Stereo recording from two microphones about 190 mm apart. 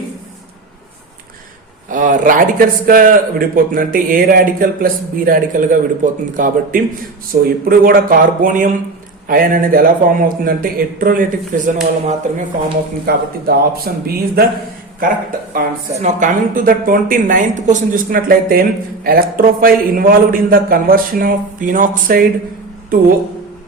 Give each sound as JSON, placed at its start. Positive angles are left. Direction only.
{"t": 1.9, "sound": "a woman's voice", "side_deg": -40}
{"t": 13.1, "sound": "a woman's voice", "side_deg": -55}
{"t": 16.0, "sound": "a woman's voice", "side_deg": -40}